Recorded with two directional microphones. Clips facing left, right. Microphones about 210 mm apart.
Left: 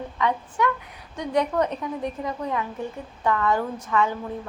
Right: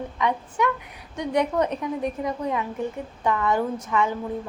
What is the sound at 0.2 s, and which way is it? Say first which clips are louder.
A woman's voice: even; 15° right (ahead or behind).